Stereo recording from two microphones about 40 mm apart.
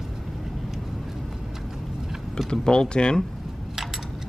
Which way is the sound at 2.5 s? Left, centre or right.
Centre.